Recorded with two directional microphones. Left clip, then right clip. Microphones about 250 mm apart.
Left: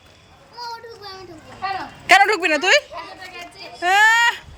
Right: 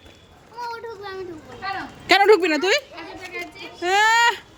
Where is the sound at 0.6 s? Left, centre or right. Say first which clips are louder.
Right 1 dB; right.